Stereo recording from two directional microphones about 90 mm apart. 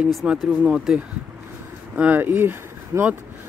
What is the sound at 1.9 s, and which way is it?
Speech, 20° right (ahead or behind).